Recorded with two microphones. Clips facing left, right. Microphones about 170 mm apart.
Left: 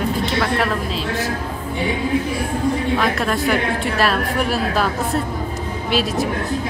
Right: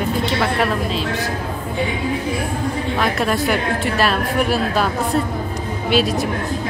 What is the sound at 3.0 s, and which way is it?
A woman's voice, centre (ahead or behind).